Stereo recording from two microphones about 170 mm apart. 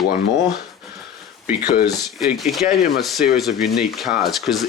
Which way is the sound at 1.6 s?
65° left (ahead or behind).